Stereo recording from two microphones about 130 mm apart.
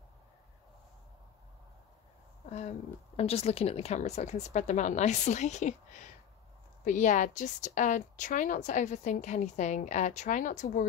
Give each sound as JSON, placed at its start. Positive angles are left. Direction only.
{"t": 3.2, "sound": "speech", "side_deg": 50}